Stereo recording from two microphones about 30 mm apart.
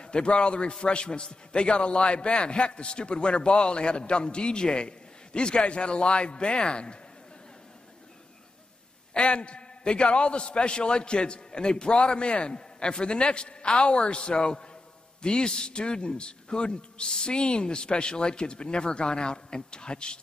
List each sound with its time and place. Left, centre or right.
0.0 s a man's voice: left
9.2 s a man's voice: left